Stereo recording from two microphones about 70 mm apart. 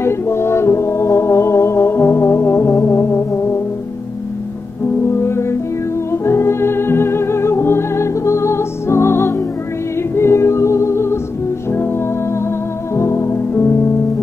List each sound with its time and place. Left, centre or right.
0.0 s music: left
5.0 s music: left
12.9 s music: left